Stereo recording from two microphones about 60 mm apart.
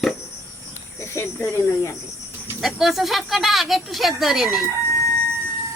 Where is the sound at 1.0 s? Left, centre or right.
Left.